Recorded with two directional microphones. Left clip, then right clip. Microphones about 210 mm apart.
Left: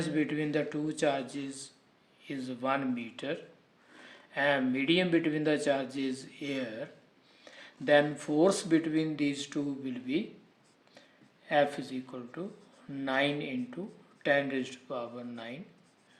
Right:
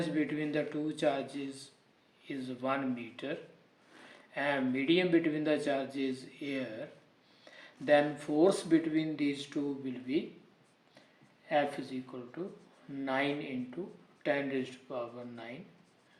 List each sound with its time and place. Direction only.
0.0 s speech: 35° left (ahead or behind)
11.4 s speech: 40° left (ahead or behind)